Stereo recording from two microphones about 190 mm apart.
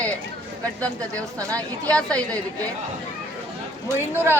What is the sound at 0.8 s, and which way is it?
Speech, 5° left (ahead or behind).